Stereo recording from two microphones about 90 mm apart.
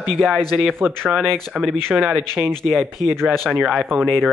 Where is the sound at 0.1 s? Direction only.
5° left (ahead or behind).